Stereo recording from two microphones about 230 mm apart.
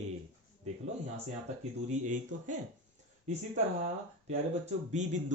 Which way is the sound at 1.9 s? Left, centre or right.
Right.